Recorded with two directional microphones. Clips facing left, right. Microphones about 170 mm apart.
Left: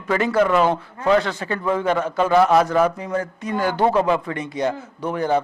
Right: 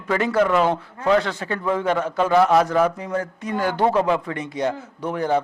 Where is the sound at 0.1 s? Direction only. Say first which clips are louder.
Left 1 dB; 10° left (ahead or behind).